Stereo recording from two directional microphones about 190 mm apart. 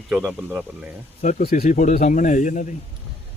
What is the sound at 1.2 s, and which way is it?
Speech, 40° left (ahead or behind).